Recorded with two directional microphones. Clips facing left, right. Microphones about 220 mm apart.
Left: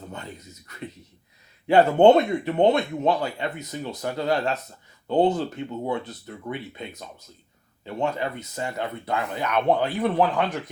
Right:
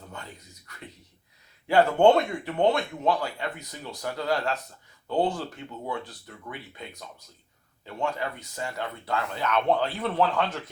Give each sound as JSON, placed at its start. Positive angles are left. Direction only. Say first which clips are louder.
{"t": 0.1, "sound": "speech", "louder": "left 5 dB", "side_deg": 20}